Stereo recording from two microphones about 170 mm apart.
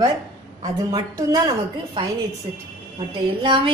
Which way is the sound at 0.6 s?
20° right (ahead or behind).